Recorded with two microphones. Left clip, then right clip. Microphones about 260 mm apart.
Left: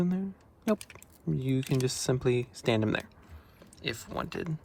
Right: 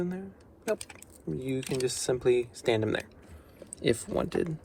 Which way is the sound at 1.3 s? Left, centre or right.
Left.